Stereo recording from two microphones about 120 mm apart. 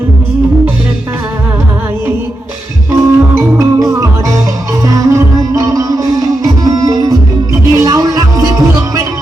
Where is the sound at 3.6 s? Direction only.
25° right (ahead or behind).